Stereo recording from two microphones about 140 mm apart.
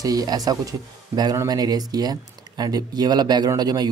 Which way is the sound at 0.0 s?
25° right (ahead or behind).